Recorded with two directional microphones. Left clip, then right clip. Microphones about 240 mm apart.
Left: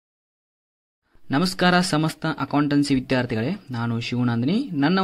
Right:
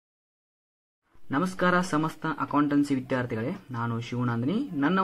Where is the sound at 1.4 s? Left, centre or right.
Left.